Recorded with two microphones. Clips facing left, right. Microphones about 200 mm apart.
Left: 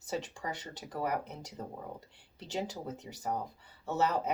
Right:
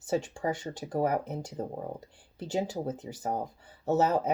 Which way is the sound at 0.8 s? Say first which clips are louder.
Right 7 dB; 45° right (ahead or behind).